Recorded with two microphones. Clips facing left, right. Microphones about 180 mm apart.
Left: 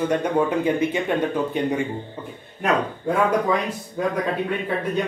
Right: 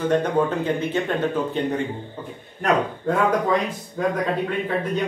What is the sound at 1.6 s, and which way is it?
Speech, 15° left (ahead or behind).